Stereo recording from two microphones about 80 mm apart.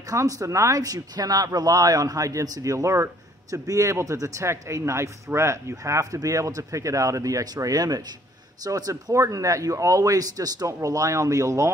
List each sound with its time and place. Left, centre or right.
0.1 s speech: right